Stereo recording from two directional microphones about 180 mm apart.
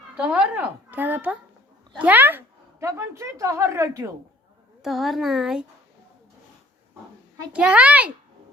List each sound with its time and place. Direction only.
0.2 s a woman's voice: 5° right (ahead or behind)
4.8 s speech: centre (ahead or behind)
7.5 s a woman's voice: 5° right (ahead or behind)